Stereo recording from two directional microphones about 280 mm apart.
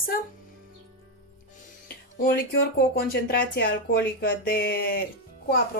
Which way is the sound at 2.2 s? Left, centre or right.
Left.